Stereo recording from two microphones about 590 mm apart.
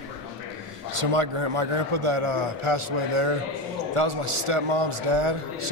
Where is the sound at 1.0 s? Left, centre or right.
Right.